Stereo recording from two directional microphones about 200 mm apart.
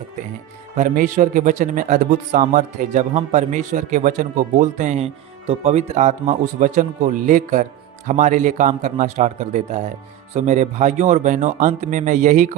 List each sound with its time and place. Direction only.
0.8 s a man's voice: 40° right (ahead or behind)